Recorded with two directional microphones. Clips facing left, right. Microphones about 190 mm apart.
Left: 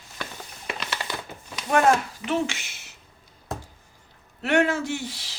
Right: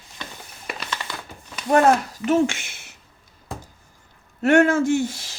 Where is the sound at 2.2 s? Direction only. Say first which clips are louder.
Right 7 dB; 45° right (ahead or behind).